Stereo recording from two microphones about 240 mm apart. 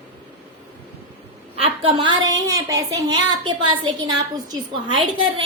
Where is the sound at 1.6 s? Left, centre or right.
Right.